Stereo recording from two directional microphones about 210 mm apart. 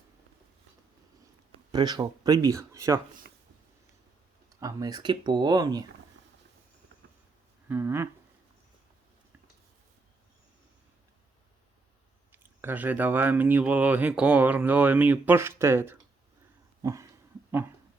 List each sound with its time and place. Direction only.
1.7 s speech: 20° right (ahead or behind)
4.4 s speech: 15° right (ahead or behind)
7.7 s speech: 10° right (ahead or behind)
12.3 s speech: 10° right (ahead or behind)
16.8 s dog: 15° right (ahead or behind)